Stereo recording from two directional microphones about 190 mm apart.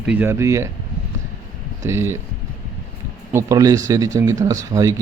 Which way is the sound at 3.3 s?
20° right (ahead or behind).